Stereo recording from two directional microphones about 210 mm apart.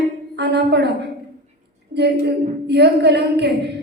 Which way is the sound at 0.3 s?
55° right (ahead or behind).